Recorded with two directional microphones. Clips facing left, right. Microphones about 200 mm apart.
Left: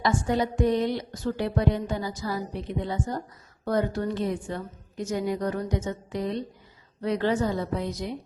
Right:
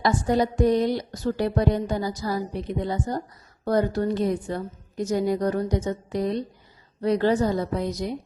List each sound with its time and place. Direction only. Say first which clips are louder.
0.0 s a woman's voice: right 3 dB; 35° right (ahead or behind)